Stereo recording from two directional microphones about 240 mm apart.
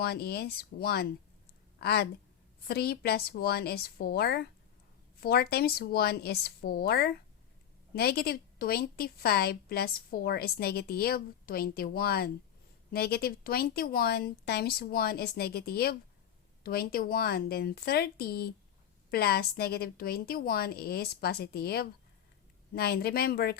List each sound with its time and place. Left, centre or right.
0.0 s a woman's voice: left